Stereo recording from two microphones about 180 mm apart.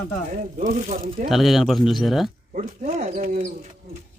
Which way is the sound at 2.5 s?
40° right (ahead or behind).